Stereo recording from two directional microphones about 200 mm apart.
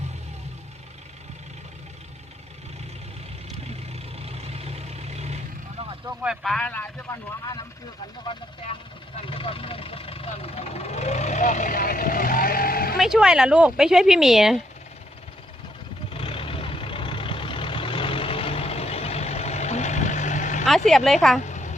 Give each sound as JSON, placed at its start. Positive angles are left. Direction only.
{"t": 3.9, "sound": "vehicle", "side_deg": -30}
{"t": 6.1, "sound": "speech", "side_deg": 0}
{"t": 9.1, "sound": "speech", "side_deg": 25}
{"t": 13.0, "sound": "speech", "side_deg": -5}
{"t": 16.1, "sound": "vehicle", "side_deg": 30}
{"t": 20.7, "sound": "speech", "side_deg": 0}
{"t": 21.4, "sound": "a sound", "side_deg": 35}